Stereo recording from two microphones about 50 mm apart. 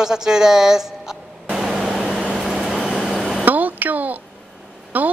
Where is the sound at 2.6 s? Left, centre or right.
Centre.